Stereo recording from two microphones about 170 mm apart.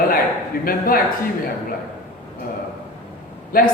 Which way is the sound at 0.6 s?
60° left (ahead or behind).